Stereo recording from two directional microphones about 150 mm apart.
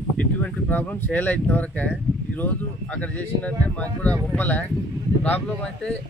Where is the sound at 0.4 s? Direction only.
10° left (ahead or behind).